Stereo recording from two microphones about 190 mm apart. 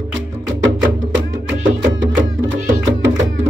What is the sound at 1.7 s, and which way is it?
Music, 90° right.